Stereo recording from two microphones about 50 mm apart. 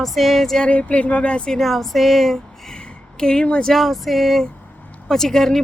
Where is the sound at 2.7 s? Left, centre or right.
Centre.